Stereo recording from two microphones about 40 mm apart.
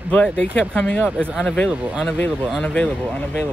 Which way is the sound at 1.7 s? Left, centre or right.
Right.